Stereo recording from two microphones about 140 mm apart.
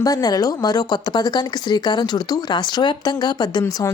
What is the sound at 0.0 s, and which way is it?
Speech, 25° left (ahead or behind).